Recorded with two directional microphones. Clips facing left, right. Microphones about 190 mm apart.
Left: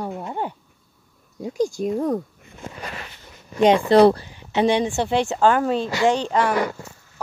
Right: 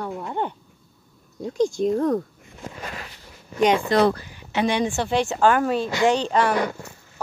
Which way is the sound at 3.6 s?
30° left (ahead or behind).